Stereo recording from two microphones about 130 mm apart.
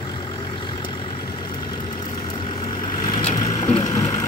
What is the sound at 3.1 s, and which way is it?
Vehicle, 50° left (ahead or behind).